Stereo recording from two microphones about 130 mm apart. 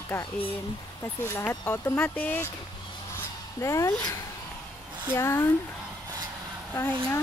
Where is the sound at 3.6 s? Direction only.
25° left (ahead or behind).